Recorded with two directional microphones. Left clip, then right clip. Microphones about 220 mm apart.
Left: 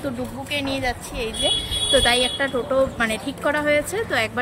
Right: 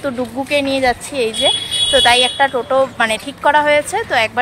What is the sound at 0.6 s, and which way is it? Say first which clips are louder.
Speech: right 9 dB; 15° right (ahead or behind).